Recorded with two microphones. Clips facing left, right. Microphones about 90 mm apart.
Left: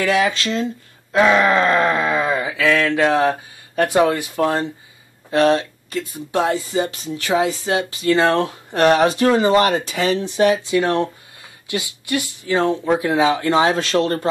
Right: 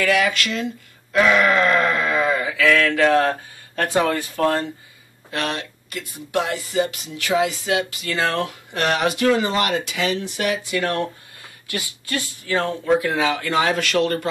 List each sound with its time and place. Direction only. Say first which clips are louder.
0.0 s speech: left 2 dB; 25° left (ahead or behind)
5.3 s speech: left 10 dB; 30° left (ahead or behind)